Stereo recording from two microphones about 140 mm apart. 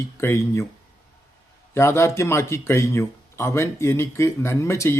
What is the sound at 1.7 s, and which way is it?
Speech, 20° left (ahead or behind).